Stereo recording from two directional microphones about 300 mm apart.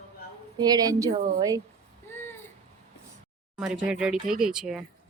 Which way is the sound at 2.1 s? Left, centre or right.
Centre.